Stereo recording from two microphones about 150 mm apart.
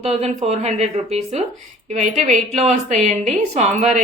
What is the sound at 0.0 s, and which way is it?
A woman's voice, 50° right (ahead or behind).